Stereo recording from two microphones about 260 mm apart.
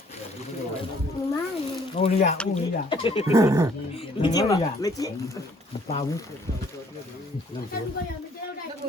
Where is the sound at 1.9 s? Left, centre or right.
Left.